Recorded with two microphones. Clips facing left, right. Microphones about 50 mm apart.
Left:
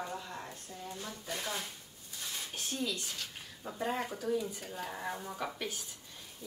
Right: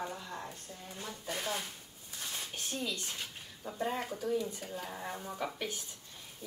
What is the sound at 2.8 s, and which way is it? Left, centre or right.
Speech, centre.